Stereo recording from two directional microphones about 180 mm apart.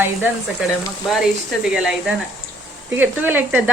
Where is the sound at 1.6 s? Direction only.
5° right (ahead or behind).